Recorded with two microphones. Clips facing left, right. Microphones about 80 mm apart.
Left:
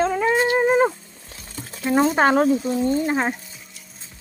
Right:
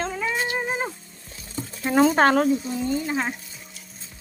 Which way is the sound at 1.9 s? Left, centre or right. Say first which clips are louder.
Even; centre.